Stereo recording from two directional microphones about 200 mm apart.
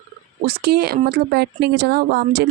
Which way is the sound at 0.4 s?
55° right (ahead or behind).